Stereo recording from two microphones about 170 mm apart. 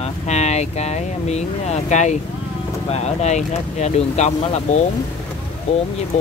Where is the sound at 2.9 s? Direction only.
40° left (ahead or behind).